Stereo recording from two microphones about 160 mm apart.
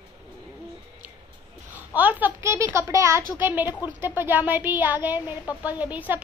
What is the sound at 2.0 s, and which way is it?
Speech, 10° right (ahead or behind).